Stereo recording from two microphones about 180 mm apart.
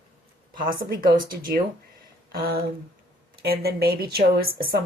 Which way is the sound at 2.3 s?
55° right (ahead or behind).